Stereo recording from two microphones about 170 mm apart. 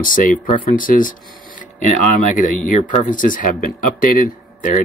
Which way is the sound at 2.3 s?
50° left (ahead or behind).